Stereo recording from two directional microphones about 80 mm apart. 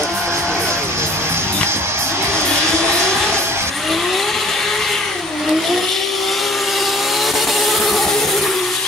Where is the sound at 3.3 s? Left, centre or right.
Right.